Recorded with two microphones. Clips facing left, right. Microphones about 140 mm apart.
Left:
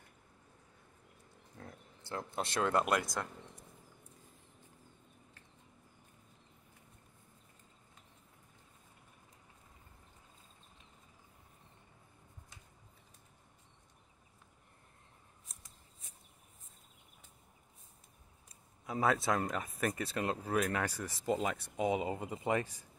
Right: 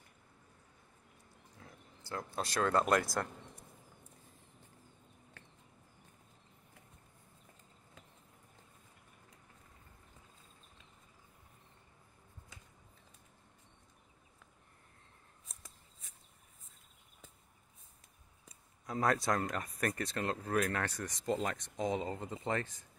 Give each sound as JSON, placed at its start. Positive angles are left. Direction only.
{"t": 1.6, "sound": "a sound", "side_deg": 50}
{"t": 2.0, "sound": "speech", "side_deg": 25}
{"t": 18.9, "sound": "speech", "side_deg": 5}